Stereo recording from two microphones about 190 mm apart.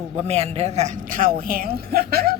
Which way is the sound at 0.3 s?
35° right (ahead or behind).